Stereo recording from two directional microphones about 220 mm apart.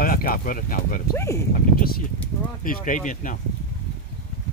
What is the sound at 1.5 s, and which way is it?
Speech, 40° left (ahead or behind).